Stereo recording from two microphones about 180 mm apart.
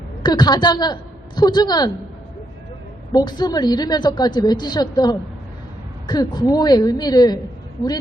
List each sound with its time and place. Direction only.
0.2 s a woman's voice: 25° left (ahead or behind)
3.1 s a woman's voice: 25° left (ahead or behind)